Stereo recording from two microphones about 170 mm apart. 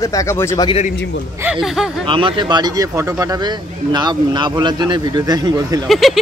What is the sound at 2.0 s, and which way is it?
Speech, 30° right (ahead or behind).